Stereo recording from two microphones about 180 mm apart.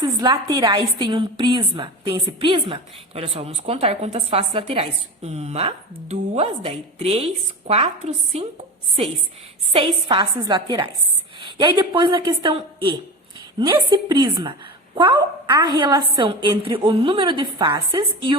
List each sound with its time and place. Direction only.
0.0 s a woman's voice: 20° right (ahead or behind)